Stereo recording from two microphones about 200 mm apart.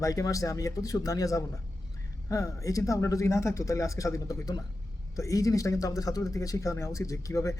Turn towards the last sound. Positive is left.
turn(degrees=15)  # may be behind; listen again after turning